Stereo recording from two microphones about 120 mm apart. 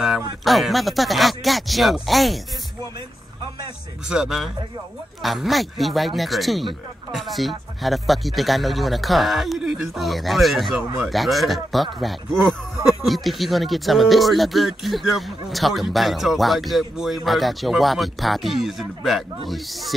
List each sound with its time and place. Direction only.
0.5 s speech: centre (ahead or behind)
4.1 s speech: 5° right (ahead or behind)